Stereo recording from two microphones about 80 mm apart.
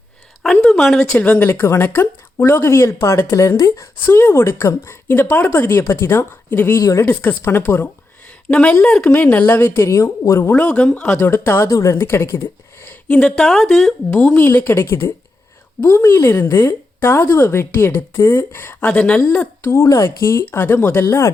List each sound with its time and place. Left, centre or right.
0.4 s a sound: centre
1.1 s speech: left
6.7 s speech: left
7.0 s speech: left
8.4 s speech: centre; by 10.3 s left
10.5 s speech: left
11.2 s speech: left
13.1 s speech: centre
14.6 s speech: left
19.6 s speech: left
20.4 s speech: left